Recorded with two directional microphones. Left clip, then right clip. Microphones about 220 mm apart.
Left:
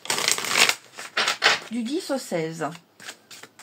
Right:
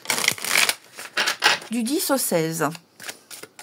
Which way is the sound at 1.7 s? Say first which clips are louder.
Right 4 dB; 50° right (ahead or behind).